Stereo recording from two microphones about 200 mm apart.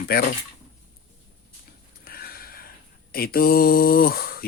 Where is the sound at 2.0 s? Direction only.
50° left (ahead or behind).